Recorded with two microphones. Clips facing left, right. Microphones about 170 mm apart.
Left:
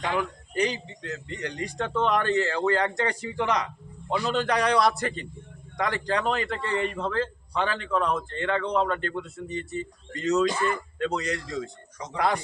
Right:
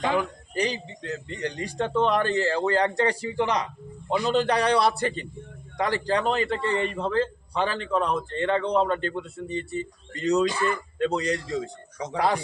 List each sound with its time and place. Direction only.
0.5 s speech: 35° right (ahead or behind)